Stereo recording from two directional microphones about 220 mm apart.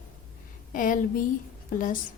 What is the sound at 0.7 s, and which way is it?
Speech, 35° left (ahead or behind).